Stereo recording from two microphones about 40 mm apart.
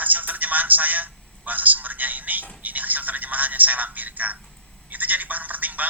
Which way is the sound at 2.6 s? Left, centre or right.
Right.